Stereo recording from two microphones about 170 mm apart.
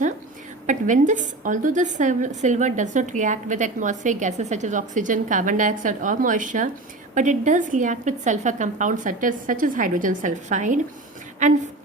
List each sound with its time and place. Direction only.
0.7 s a woman's voice: 45° right (ahead or behind)